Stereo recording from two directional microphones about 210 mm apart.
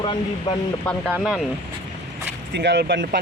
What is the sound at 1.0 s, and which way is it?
Speech, 5° right (ahead or behind).